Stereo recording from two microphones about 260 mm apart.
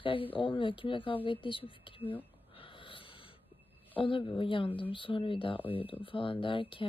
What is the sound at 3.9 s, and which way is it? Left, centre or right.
Speech, centre.